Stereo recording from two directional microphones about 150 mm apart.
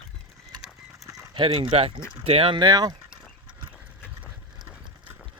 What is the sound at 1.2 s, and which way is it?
Speech, 35° right (ahead or behind).